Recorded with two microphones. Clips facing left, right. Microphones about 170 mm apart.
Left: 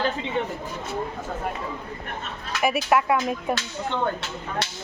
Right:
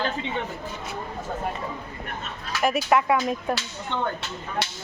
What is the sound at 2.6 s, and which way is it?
Speech, centre (ahead or behind).